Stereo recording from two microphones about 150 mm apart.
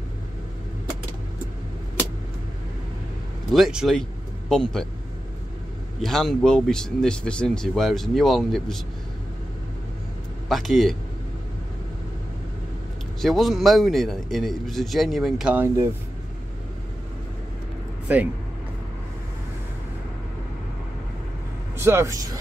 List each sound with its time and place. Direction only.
3.5 s speech: centre (ahead or behind)
5.9 s speech: centre (ahead or behind)
10.5 s speech: centre (ahead or behind)
13.2 s speech: centre (ahead or behind)
18.0 s speech: 10° right (ahead or behind)
21.7 s speech: 15° right (ahead or behind)